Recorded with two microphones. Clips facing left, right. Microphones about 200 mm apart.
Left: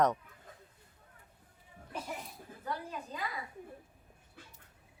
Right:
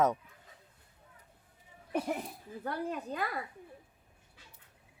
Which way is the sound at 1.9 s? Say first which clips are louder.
Right 9 dB; 60° right (ahead or behind).